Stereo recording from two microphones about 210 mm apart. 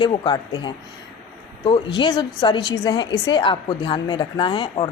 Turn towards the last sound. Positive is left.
turn(degrees=25)  # may be behind; listen again after turning